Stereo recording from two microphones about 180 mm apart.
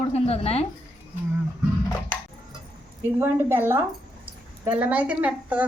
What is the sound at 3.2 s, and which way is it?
A woman's voice, 10° right (ahead or behind).